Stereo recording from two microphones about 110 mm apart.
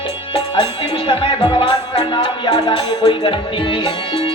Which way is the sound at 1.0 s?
50° left (ahead or behind).